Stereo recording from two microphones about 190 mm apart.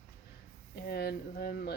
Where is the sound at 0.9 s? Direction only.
55° left (ahead or behind).